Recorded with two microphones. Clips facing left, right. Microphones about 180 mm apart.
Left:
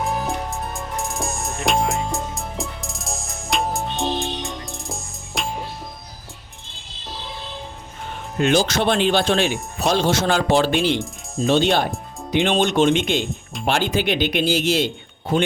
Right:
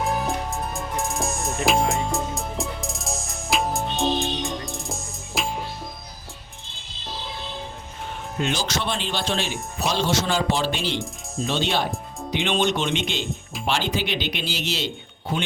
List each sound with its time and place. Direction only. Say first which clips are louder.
0.0 s music: left 1 dB; centre (ahead or behind)
8.4 s speech: left 8 dB; 55° left (ahead or behind)